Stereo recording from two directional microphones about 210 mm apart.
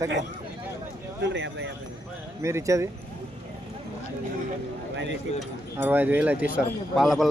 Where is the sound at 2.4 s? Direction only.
15° right (ahead or behind).